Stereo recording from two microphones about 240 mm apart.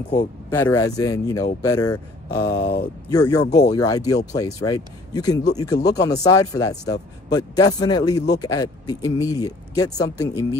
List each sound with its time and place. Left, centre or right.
0.1 s speech: centre
2.4 s speech: left
3.1 s speech: centre